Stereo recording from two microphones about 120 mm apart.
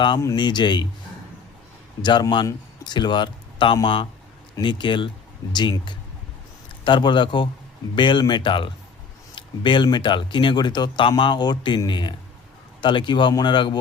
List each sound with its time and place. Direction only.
0.3 s speech: 40° left (ahead or behind)
2.0 s speech: 35° left (ahead or behind)